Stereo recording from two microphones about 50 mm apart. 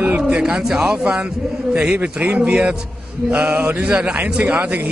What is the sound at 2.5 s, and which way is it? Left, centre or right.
Speech, centre.